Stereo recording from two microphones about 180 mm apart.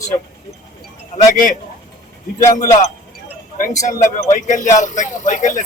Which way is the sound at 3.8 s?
45° left (ahead or behind).